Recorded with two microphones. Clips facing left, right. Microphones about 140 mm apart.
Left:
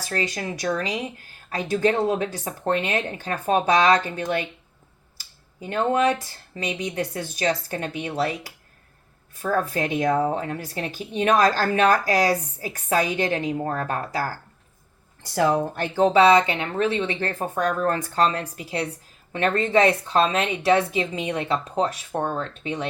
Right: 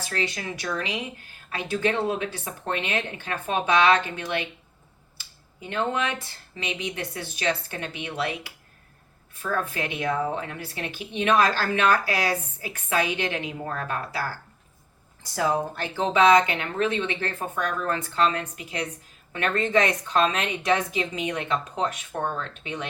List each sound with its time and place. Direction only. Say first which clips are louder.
0.0 s speech: left 3 dB; 40° left (ahead or behind)
15.4 s speech: left 4 dB; 50° left (ahead or behind)